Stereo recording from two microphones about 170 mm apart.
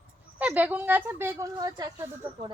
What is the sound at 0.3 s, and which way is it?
A woman's voice, 10° right (ahead or behind).